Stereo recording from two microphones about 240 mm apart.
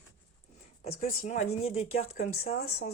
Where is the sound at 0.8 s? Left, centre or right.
Left.